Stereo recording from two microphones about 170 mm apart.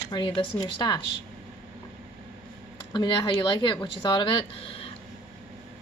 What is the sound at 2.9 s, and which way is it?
A woman's voice, 25° left (ahead or behind).